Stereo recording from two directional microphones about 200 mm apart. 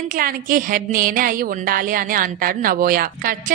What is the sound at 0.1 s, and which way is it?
A woman's voice, 45° right (ahead or behind).